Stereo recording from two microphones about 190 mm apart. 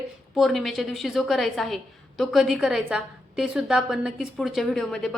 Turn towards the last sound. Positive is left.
turn(degrees=0)  # may be behind; listen again after turning